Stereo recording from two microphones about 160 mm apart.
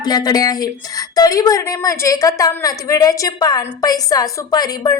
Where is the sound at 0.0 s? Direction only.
25° left (ahead or behind).